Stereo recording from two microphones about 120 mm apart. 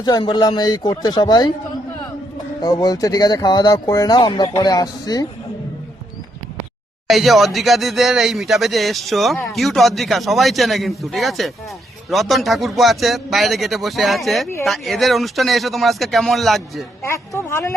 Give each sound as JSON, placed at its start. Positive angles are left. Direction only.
{"t": 0.0, "sound": "speech", "side_deg": 40}
{"t": 2.6, "sound": "speech", "side_deg": 35}
{"t": 7.1, "sound": "speech", "side_deg": 0}
{"t": 17.0, "sound": "speech", "side_deg": 20}